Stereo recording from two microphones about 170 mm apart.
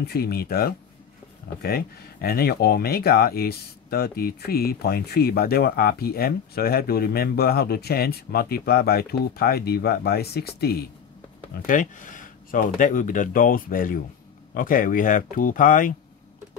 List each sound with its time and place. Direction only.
0.0 s speech: 65° left (ahead or behind)
11.5 s speech: 50° left (ahead or behind)